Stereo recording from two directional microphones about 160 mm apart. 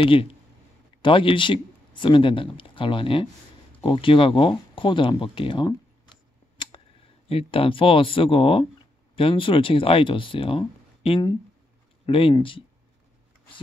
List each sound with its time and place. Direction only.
0.0 s speech: 35° left (ahead or behind)
7.2 s speech: 35° left (ahead or behind)